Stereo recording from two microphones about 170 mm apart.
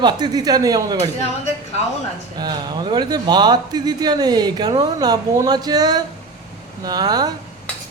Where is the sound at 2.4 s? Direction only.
25° right (ahead or behind).